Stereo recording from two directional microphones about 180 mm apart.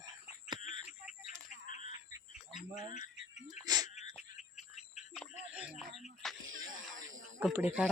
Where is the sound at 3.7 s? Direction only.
20° right (ahead or behind).